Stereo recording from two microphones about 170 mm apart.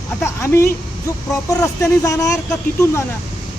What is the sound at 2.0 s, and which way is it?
Speech, 20° left (ahead or behind).